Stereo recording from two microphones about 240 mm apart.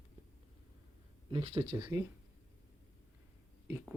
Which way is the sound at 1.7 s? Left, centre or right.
Centre.